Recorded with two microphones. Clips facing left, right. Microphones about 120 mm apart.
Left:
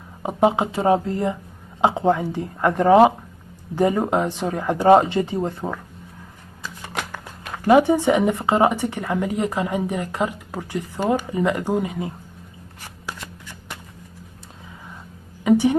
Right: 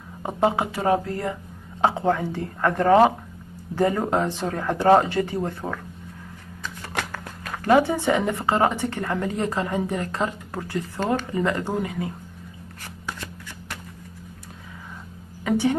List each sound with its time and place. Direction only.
0.2 s speech: 15° left (ahead or behind)
6.6 s shuffling cards: 5° left (ahead or behind)
7.4 s speech: 15° left (ahead or behind)
15.4 s a sound: 15° left (ahead or behind)